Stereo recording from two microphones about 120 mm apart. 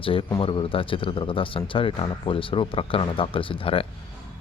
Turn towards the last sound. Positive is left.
turn(degrees=50)  # may be behind; listen again after turning